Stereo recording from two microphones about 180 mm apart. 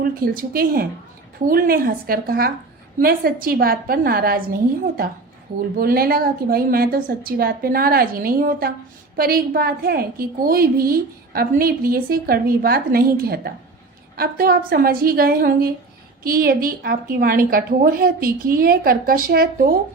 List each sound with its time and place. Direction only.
0.0 s a woman's voice: 55° right (ahead or behind)
5.8 s a woman's voice: 55° right (ahead or behind)